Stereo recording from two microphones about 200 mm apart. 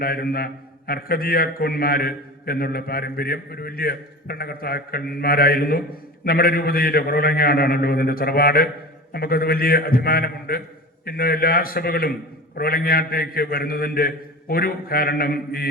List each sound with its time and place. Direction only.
0.0 s a man's voice: 50° left (ahead or behind)